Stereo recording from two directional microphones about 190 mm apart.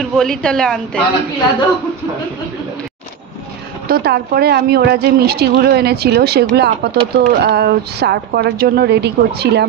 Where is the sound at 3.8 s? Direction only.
55° right (ahead or behind).